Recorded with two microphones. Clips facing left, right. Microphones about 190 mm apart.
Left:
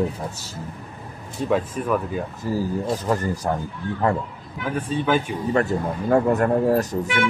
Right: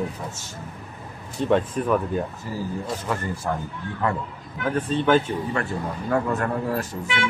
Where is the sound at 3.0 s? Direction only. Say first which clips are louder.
Left 5 dB; 40° left (ahead or behind).